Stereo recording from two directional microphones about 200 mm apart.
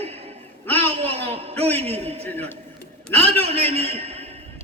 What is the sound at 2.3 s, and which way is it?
Speech, 10° left (ahead or behind).